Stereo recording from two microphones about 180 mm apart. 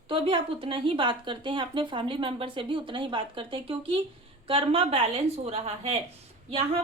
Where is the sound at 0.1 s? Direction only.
30° right (ahead or behind).